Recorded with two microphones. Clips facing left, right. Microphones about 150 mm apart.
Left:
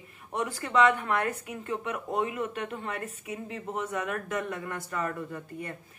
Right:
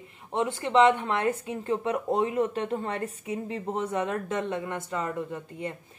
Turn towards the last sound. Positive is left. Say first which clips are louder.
# right 3 dB
turn(degrees=-20)  # may be behind; listen again after turning